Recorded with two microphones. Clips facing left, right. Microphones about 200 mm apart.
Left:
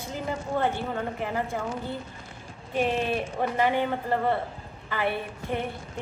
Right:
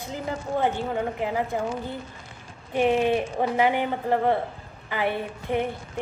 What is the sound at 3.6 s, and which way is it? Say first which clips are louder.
A woman's voice: right 1 dB; 15° right (ahead or behind).